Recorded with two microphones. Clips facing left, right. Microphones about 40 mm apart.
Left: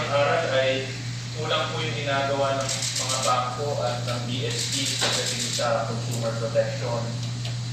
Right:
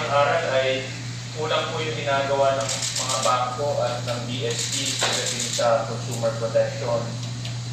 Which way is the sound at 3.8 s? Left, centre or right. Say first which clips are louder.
Right 1 dB; centre.